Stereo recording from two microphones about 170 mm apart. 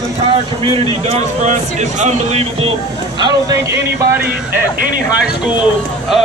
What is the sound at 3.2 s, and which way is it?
Speech, 20° right (ahead or behind).